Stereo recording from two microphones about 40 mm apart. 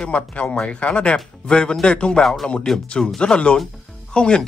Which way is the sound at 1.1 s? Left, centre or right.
Centre.